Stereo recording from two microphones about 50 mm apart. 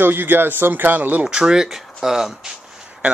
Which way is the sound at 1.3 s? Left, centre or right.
Centre.